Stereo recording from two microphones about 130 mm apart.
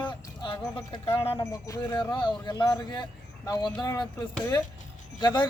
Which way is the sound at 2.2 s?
35° left (ahead or behind).